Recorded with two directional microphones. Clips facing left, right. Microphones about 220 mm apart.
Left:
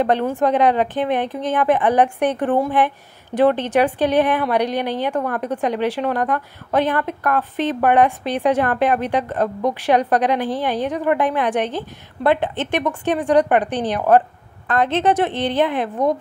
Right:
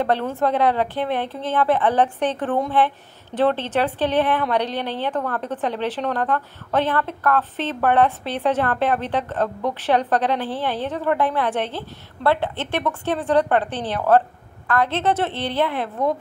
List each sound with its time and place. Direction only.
0.0 s a woman's voice: 15° left (ahead or behind)